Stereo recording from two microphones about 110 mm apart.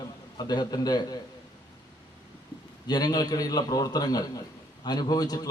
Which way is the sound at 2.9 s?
35° left (ahead or behind).